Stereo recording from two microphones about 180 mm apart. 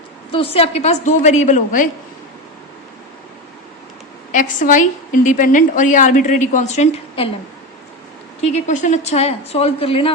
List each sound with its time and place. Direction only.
0.3 s a woman's voice: 30° left (ahead or behind)
4.3 s a woman's voice: 45° left (ahead or behind)
8.4 s a woman's voice: 35° left (ahead or behind)